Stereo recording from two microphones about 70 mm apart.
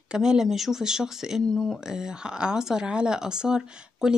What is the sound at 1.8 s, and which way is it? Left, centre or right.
Speech, centre.